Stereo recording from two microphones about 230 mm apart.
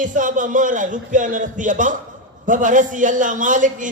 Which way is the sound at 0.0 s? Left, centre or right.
Right.